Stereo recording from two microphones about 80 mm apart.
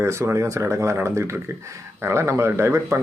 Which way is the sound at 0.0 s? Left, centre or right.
Right.